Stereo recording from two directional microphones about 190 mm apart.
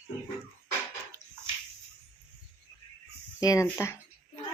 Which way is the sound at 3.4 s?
15° left (ahead or behind).